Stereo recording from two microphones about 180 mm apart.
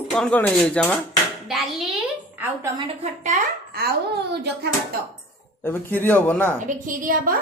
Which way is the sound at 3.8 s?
55° right (ahead or behind).